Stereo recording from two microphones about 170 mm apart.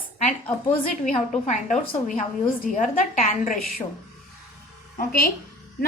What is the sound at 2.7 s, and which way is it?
Speech, 50° left (ahead or behind).